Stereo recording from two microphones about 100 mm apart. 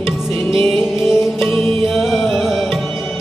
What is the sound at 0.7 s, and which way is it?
Music, 5° right (ahead or behind).